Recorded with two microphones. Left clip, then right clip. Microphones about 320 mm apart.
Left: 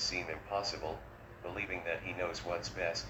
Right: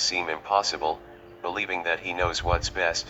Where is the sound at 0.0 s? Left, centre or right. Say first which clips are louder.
Right 11 dB; right.